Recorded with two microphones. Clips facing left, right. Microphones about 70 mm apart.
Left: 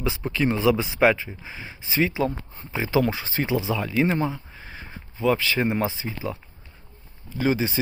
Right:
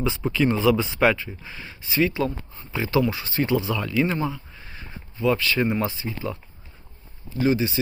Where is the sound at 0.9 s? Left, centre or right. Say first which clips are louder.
Left 1 dB; centre.